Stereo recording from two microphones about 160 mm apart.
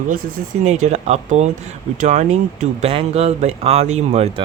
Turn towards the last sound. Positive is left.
turn(degrees=-40)  # may be behind; listen again after turning